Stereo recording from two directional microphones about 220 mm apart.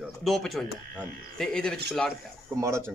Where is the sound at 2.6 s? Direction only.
10° right (ahead or behind).